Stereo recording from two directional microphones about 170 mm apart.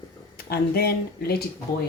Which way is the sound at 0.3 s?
65° left (ahead or behind).